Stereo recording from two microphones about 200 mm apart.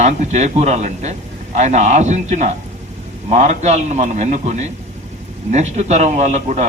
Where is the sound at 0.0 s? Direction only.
35° right (ahead or behind).